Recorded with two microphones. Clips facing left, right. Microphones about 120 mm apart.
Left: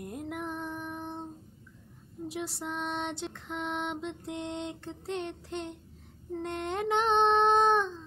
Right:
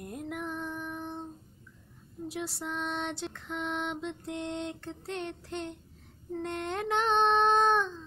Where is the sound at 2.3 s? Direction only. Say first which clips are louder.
Even; 20° left (ahead or behind).